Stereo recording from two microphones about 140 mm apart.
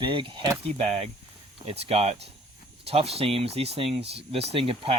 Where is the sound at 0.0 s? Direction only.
35° right (ahead or behind).